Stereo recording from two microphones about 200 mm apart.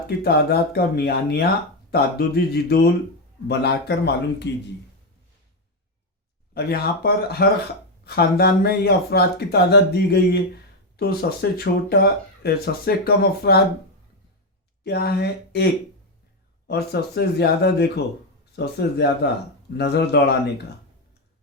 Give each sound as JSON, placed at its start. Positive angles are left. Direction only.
{"t": 0.2, "sound": "speech", "side_deg": 50}
{"t": 6.5, "sound": "speech", "side_deg": 50}
{"t": 14.8, "sound": "speech", "side_deg": 55}
{"t": 16.6, "sound": "speech", "side_deg": 55}